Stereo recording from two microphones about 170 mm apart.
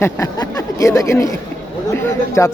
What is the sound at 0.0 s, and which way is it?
A man's voice, 20° left (ahead or behind).